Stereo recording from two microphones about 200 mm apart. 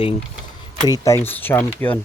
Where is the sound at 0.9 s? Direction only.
15° left (ahead or behind).